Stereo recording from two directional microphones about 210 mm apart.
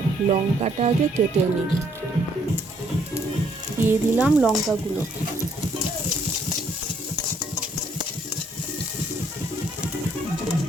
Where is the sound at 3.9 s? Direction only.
5° right (ahead or behind).